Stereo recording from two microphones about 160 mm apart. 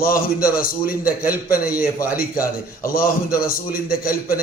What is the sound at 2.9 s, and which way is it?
A man's voice, 65° left (ahead or behind).